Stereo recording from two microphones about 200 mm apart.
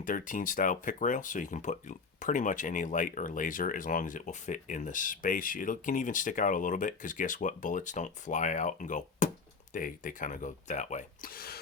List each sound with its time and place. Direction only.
0.0 s speech: 40° left (ahead or behind)